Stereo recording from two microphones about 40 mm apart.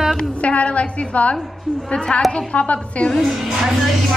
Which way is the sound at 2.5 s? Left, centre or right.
Left.